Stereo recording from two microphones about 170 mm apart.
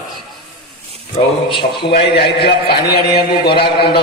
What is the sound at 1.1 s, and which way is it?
Speech, 30° left (ahead or behind).